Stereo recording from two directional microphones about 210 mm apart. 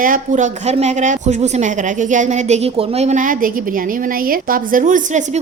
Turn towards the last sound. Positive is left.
turn(degrees=-35)  # may be behind; listen again after turning